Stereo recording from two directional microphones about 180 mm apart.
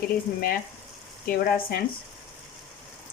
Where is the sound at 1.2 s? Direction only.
55° left (ahead or behind).